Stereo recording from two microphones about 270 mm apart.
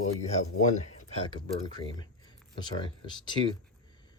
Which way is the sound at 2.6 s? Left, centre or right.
Centre.